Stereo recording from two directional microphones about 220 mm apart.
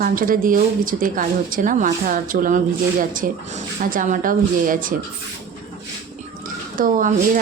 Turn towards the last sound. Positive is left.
turn(degrees=-35)  # may be behind; listen again after turning